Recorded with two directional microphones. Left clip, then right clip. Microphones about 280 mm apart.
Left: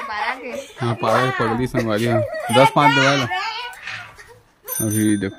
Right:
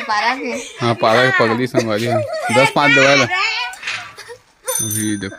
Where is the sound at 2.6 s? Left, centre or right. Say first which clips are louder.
Right 4 dB; centre.